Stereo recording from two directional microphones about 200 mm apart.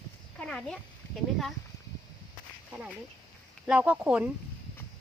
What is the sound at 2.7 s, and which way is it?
Speech, 5° right (ahead or behind).